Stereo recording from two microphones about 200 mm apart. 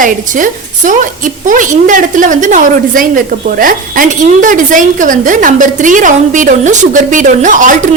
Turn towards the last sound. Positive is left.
turn(degrees=-40)  # may be behind; listen again after turning